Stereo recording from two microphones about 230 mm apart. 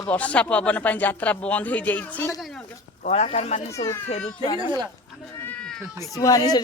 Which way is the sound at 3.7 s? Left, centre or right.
Centre.